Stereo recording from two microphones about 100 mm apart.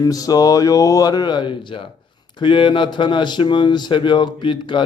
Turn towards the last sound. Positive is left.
turn(degrees=55)  # may be behind; listen again after turning